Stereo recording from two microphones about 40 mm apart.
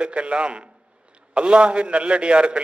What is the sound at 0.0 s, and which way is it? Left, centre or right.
A man's voice, right.